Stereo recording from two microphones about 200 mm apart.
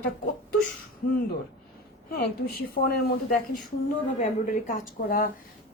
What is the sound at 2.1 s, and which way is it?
Speech, 50° left (ahead or behind).